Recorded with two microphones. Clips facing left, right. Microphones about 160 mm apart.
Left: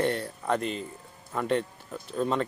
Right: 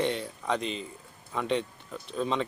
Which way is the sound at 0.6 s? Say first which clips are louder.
Left 2 dB; 50° left (ahead or behind).